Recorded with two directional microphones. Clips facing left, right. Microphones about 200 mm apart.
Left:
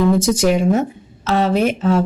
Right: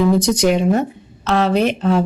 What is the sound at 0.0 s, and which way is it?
A woman's voice, centre (ahead or behind).